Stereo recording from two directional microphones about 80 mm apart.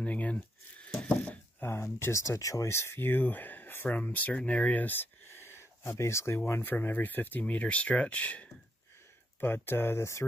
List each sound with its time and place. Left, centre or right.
0.0 s a sound: centre
1.7 s speech: left; by 8.5 s centre
9.4 s speech: left